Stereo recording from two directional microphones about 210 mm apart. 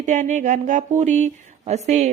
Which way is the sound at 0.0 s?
35° right (ahead or behind).